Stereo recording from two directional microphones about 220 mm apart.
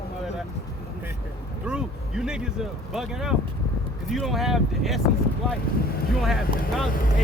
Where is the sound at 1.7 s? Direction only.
5° right (ahead or behind).